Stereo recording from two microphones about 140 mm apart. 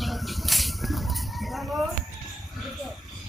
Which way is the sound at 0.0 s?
Centre (ahead or behind).